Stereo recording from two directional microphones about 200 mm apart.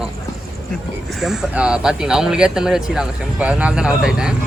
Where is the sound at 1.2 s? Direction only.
Centre (ahead or behind).